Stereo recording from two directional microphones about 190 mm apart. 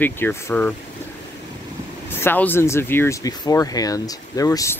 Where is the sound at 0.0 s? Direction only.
10° left (ahead or behind).